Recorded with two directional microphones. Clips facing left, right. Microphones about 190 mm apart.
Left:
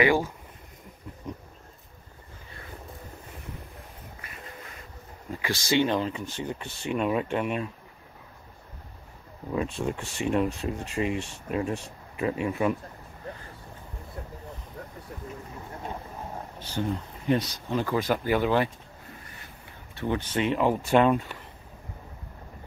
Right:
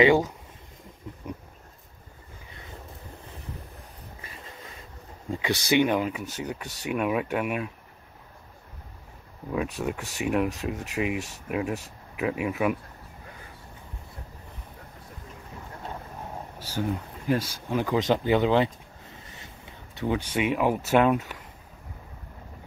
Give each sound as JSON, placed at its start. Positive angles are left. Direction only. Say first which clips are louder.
{"t": 0.0, "sound": "speech", "louder": "right 3 dB", "side_deg": -20}
{"t": 5.7, "sound": "speech", "louder": "right 1 dB", "side_deg": -15}
{"t": 9.5, "sound": "speech", "louder": "even", "side_deg": -5}
{"t": 16.5, "sound": "speech", "louder": "right 1 dB", "side_deg": -10}